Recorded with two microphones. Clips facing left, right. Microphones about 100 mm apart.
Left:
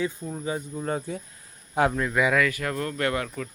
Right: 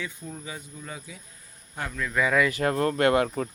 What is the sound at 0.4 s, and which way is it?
Speech, 35° left (ahead or behind).